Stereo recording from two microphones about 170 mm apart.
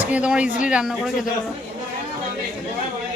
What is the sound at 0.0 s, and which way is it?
A woman's voice, 10° right (ahead or behind).